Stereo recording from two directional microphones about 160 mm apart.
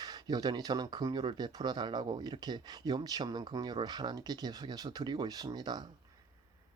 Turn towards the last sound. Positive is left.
turn(degrees=-25)  # may be behind; listen again after turning